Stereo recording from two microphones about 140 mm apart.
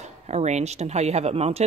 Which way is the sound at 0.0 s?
50° right (ahead or behind).